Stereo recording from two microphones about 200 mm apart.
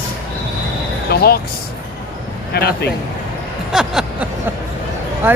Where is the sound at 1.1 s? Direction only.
50° left (ahead or behind).